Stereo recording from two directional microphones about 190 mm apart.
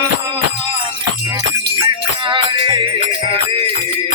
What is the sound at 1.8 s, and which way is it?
Music, 25° right (ahead or behind).